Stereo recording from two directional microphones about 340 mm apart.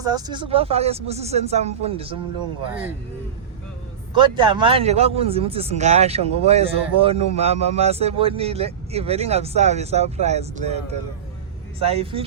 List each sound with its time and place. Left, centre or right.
0.0 s speech: centre
4.2 s speech: centre